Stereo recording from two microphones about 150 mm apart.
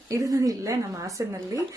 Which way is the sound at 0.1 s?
20° right (ahead or behind).